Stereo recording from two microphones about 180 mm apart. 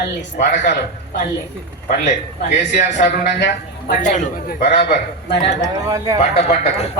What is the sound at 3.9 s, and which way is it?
Speech, 45° left (ahead or behind).